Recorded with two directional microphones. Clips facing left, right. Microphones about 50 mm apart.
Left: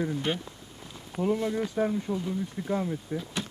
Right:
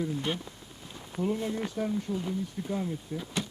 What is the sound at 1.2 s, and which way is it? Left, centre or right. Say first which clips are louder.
Speech: left 3 dB; left.